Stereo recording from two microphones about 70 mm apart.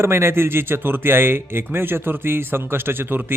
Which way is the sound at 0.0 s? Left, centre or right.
Right.